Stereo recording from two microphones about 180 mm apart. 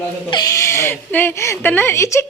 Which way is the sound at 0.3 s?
20° left (ahead or behind).